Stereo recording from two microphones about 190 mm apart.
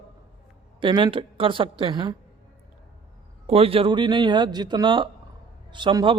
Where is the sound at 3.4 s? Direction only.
30° right (ahead or behind).